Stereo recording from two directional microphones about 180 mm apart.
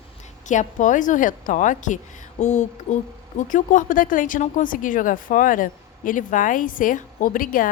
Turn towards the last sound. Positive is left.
turn(degrees=50)  # may be behind; listen again after turning